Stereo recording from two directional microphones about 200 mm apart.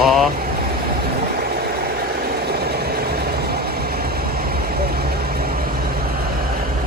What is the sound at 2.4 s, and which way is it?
Vehicle, 50° right (ahead or behind).